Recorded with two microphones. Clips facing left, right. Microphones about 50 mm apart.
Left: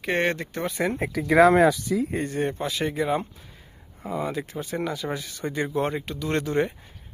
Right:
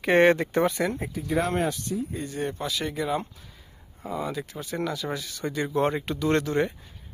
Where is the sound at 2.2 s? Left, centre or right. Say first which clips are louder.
Left 4 dB; left.